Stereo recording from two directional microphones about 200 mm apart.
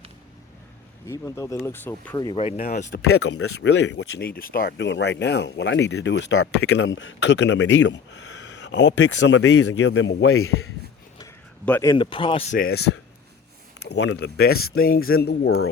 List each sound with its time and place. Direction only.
1.0 s speech: 15° left (ahead or behind)
2.1 s speech: 25° left (ahead or behind)
2.6 s speech: 45° left (ahead or behind)
3.0 s speech: 85° left
6.6 s speech: 60° left (ahead or behind); by 10.7 s 90° left
11.6 s speech: 10° left (ahead or behind); by 12.5 s 30° left (ahead or behind)
12.5 s speech: 50° left (ahead or behind)
15.4 s speech: 90° left